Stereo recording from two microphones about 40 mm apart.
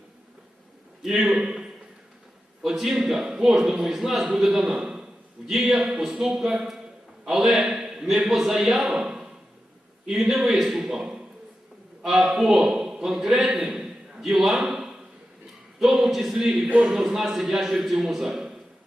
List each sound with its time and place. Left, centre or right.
1.0 s a man's voice: centre
2.6 s a man's voice: centre
4.7 s a sound: centre
5.5 s speech: centre
5.7 s a man's voice: centre
12.0 s a man's voice: centre
16.6 s a man's voice: right
16.9 s a man's voice: centre